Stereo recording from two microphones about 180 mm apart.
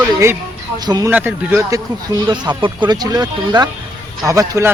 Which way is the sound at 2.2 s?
25° right (ahead or behind).